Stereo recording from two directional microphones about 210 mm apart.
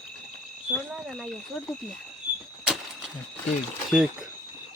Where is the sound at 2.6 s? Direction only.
5° right (ahead or behind).